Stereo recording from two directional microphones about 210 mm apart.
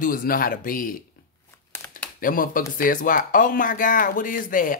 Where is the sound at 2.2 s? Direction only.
40° left (ahead or behind).